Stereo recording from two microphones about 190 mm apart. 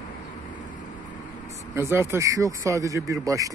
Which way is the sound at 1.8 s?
15° right (ahead or behind).